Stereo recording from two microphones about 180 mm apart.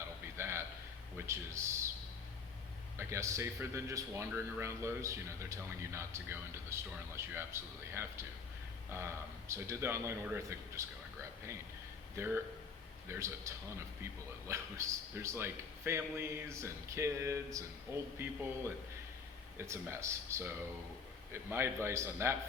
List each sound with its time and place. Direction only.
0.3 s a sound: 15° right (ahead or behind)
1.1 s speech: 15° right (ahead or behind)
3.0 s a man's voice: 15° right (ahead or behind)
12.1 s a man's voice: 10° right (ahead or behind)